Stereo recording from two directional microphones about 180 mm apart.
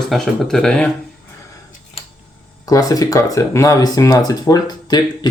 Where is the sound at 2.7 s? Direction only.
20° left (ahead or behind).